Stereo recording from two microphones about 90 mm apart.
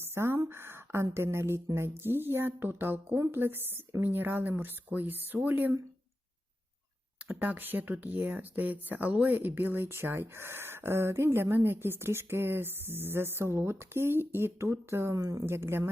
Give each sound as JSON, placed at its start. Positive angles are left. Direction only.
{"t": 0.0, "sound": "a sound", "side_deg": -30}
{"t": 2.0, "sound": "speech", "side_deg": -25}
{"t": 7.3, "sound": "speech", "side_deg": -20}
{"t": 15.2, "sound": "a woman's voice", "side_deg": -40}
{"t": 15.4, "sound": "speech", "side_deg": -30}